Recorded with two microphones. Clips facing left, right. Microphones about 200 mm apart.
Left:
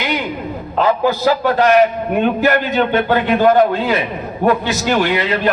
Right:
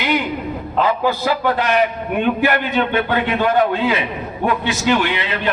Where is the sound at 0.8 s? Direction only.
45° left (ahead or behind).